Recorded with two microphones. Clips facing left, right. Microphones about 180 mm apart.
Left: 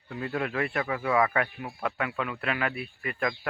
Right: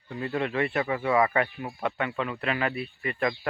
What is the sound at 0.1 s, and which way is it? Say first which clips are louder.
Speech: right 2 dB; centre (ahead or behind).